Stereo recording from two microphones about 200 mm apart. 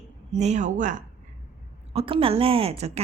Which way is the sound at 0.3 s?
35° right (ahead or behind).